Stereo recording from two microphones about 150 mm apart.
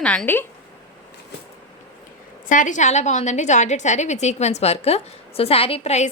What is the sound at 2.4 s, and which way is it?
A woman's voice, 60° left (ahead or behind).